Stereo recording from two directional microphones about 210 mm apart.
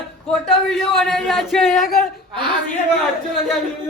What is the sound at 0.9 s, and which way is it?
Speech, centre (ahead or behind).